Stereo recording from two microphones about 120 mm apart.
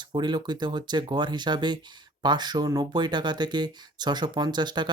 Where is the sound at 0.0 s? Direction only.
40° right (ahead or behind).